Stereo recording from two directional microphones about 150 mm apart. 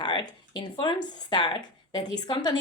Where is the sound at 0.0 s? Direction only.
30° left (ahead or behind).